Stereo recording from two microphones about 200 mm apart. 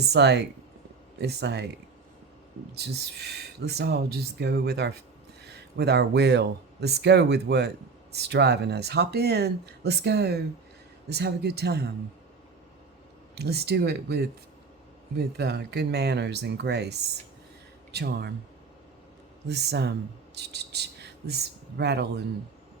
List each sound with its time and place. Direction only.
0.1 s speech: 60° right (ahead or behind)
2.7 s speech: 55° right (ahead or behind)
13.3 s speech: 55° right (ahead or behind)
19.5 s speech: 55° right (ahead or behind)